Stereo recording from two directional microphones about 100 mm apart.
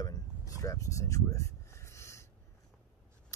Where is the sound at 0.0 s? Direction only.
35° left (ahead or behind).